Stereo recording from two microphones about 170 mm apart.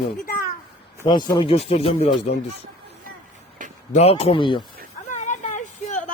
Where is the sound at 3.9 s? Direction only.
35° left (ahead or behind).